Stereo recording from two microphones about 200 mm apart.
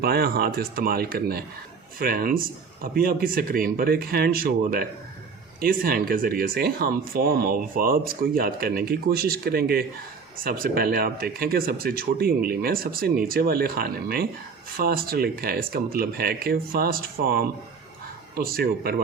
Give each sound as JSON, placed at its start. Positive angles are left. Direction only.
{"t": 0.0, "sound": "speech", "side_deg": -50}